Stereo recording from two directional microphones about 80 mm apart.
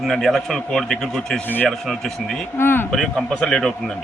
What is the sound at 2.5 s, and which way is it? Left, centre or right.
Speech, left.